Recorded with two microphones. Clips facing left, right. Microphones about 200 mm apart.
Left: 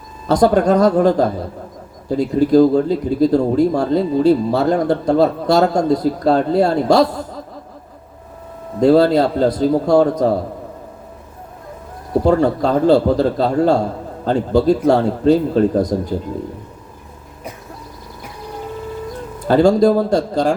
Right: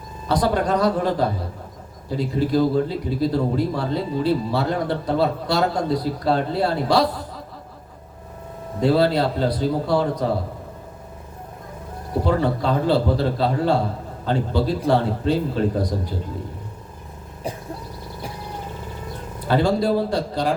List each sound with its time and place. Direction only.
0.3 s speech: 45° left (ahead or behind)
8.8 s speech: 45° left (ahead or behind)
12.2 s speech: 45° left (ahead or behind)
19.5 s speech: 45° left (ahead or behind)